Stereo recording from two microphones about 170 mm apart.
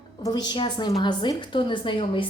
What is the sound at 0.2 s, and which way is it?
A woman's voice, 25° left (ahead or behind).